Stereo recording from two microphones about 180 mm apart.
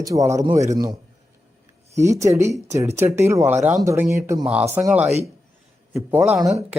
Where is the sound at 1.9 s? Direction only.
15° right (ahead or behind).